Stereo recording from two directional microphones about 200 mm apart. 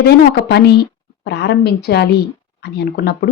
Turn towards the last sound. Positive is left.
turn(degrees=55)  # may be behind; listen again after turning